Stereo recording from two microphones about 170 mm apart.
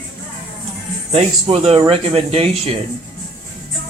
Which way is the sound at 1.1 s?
35° right (ahead or behind).